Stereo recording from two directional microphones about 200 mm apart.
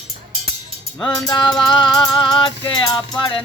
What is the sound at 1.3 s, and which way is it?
Music, 20° left (ahead or behind).